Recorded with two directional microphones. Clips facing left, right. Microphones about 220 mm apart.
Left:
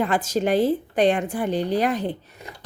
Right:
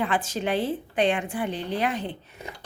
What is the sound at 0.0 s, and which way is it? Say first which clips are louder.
A woman's voice: left 5 dB; 40° left (ahead or behind).